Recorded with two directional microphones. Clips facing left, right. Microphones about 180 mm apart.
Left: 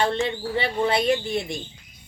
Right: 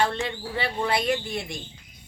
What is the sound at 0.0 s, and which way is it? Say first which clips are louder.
Speech: left 3 dB; 25° left (ahead or behind).